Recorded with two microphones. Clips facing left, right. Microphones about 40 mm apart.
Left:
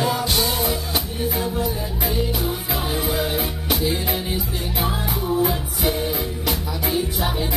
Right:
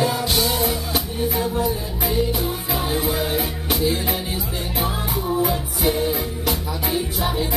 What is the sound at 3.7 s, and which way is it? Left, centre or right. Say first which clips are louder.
Music: right 1 dB; centre.